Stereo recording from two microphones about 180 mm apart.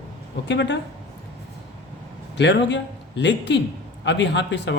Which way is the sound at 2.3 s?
75° left (ahead or behind).